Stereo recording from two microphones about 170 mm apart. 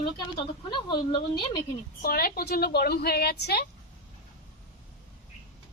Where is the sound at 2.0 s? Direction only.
60° left (ahead or behind).